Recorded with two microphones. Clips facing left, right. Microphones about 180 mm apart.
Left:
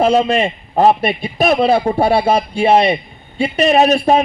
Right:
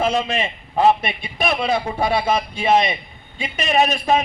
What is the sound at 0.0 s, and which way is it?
A man's voice, 40° left (ahead or behind).